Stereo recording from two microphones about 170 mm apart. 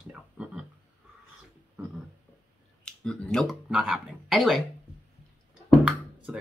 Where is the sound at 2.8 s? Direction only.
5° left (ahead or behind).